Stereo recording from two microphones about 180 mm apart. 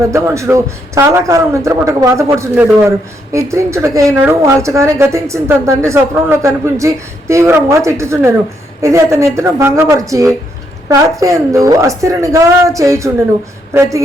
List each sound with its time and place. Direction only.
0.0 s a woman's voice: 15° right (ahead or behind)